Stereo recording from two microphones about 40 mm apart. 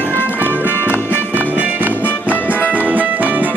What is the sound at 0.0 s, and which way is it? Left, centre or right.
Music, left.